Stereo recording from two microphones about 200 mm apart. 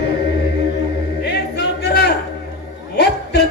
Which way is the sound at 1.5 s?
55° left (ahead or behind).